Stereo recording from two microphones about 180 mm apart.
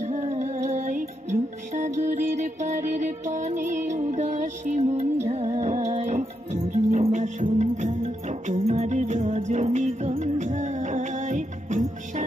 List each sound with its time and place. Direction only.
0.0 s music: 40° right (ahead or behind)